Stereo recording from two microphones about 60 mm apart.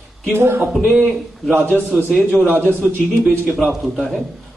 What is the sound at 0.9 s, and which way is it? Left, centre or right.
Speech, centre.